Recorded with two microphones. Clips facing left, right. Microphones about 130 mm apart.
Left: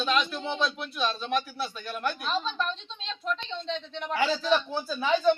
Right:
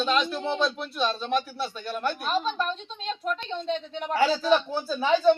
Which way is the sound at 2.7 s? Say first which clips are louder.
Right 4 dB; 45° right (ahead or behind).